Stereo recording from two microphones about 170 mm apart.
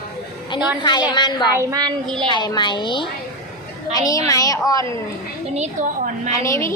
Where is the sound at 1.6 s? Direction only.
20° right (ahead or behind).